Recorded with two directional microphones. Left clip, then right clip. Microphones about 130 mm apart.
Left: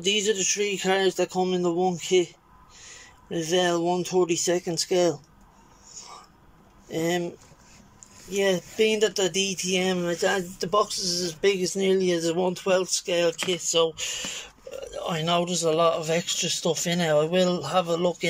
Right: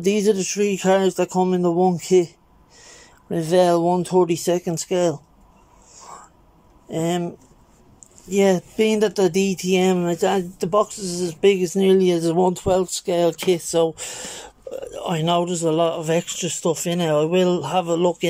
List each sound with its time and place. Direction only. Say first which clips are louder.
0.0 s speech: right 5 dB; 40° right (ahead or behind)
0.5 s speech: right 6 dB; 25° right (ahead or behind)
5.9 s a sound: right 4 dB; 20° right (ahead or behind)
6.9 s speech: right 3 dB; 20° right (ahead or behind); by 14.8 s 40° right (ahead or behind)
14.8 s speech: right 4 dB; 15° right (ahead or behind)